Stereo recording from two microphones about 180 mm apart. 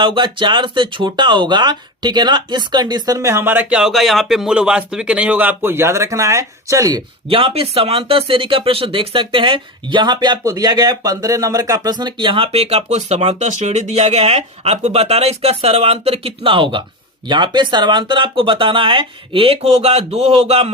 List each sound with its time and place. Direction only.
0.0 s speech: 25° right (ahead or behind)
7.3 s speech: 30° right (ahead or behind)